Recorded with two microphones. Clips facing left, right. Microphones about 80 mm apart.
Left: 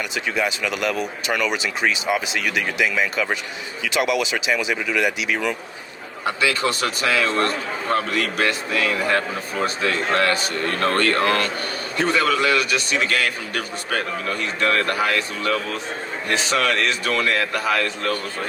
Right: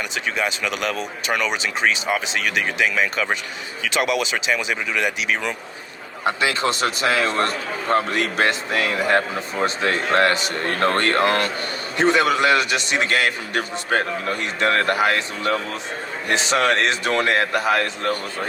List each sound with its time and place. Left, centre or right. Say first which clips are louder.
1.4 s speech: even; right
2.0 s speech: left 1 dB; right
2.8 s speech: even; right
4.9 s speech: left 2 dB; left
6.2 s a man's voice: right 1 dB; right